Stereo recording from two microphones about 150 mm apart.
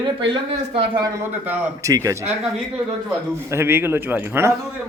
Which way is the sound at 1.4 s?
20° right (ahead or behind).